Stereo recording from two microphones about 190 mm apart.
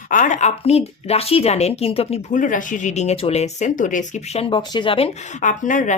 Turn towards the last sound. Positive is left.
turn(degrees=40)  # may be behind; listen again after turning